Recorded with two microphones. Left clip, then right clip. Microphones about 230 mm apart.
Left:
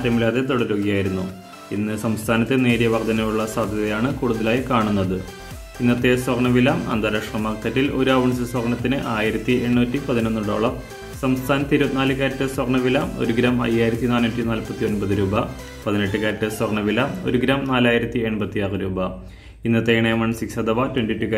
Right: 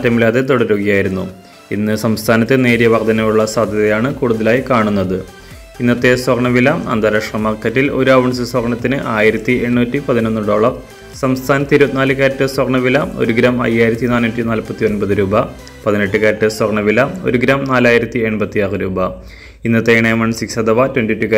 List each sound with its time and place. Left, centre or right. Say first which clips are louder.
0.0 s a man's voice: right 8 dB; right